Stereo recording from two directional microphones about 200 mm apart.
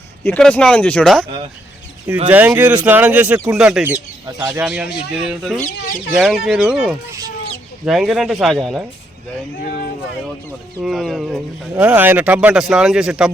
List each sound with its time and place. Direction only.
0.3 s a man's voice: 5° left (ahead or behind)
2.3 s speech: 10° right (ahead or behind)
4.3 s speech: 15° right (ahead or behind)
4.6 s a man's voice: 5° right (ahead or behind)
10.8 s a man's voice: centre (ahead or behind)